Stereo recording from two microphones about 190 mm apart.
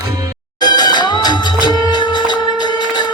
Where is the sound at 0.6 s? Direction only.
20° left (ahead or behind).